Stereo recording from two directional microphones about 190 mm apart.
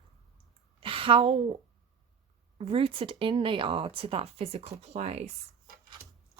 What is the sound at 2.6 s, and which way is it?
Speech, 30° right (ahead or behind).